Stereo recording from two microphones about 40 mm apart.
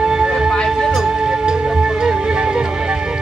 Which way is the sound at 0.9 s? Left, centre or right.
Centre.